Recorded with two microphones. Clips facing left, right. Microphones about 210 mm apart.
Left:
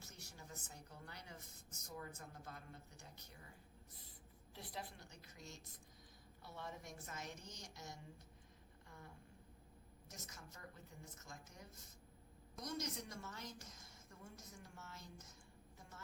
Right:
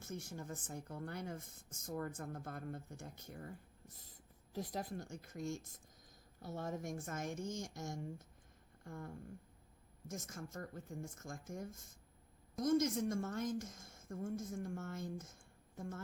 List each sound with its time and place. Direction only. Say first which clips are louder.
0.0 s speech: right 12 dB; 50° right (ahead or behind)
4.5 s speech: right 10 dB; 40° right (ahead or behind)
8.8 s a sound: right 11 dB; 50° right (ahead or behind)
10.1 s speech: right 11 dB; 50° right (ahead or behind)